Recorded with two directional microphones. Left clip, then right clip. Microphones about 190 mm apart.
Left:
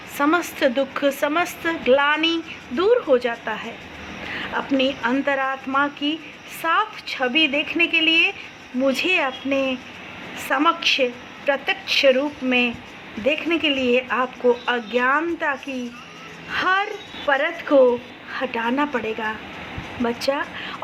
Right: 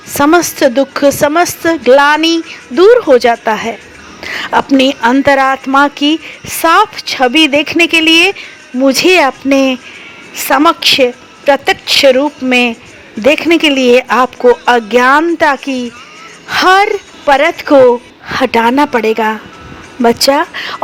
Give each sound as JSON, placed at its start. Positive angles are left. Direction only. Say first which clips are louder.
{"t": 0.1, "sound": "a woman's voice", "louder": "right 12 dB", "side_deg": -50}
{"t": 4.3, "sound": "a sound", "louder": "right 15 dB", "side_deg": -65}
{"t": 4.8, "sound": "speech", "louder": "right 12 dB", "side_deg": -60}